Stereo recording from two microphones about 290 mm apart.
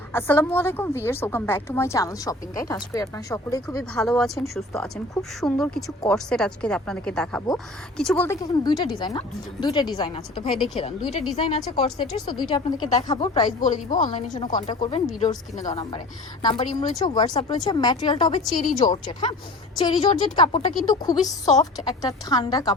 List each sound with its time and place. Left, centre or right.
0.1 s a woman's voice: centre
14.0 s a woman's voice: left
17.0 s a woman's voice: centre
18.6 s a woman's voice: left
19.0 s a woman's voice: centre